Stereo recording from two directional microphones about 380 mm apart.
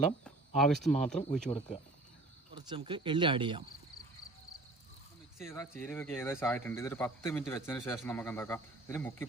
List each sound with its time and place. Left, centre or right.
0.3 s speech: centre
1.5 s speech: centre
2.6 s speech: centre
5.4 s speech: centre